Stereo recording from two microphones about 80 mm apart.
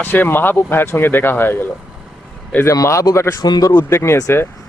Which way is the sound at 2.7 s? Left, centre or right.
Left.